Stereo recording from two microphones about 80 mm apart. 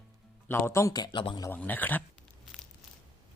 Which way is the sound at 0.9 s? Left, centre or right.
Left.